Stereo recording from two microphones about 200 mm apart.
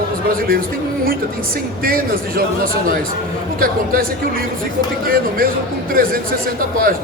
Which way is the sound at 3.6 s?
45° right (ahead or behind).